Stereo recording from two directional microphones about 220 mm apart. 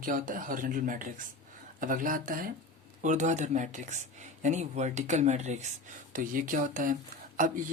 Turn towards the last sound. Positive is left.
turn(degrees=-35)  # may be behind; listen again after turning